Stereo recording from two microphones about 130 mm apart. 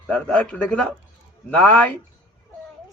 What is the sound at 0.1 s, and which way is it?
A man's voice, 10° left (ahead or behind).